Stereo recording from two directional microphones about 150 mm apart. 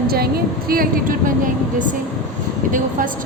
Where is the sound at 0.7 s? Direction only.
70° right (ahead or behind).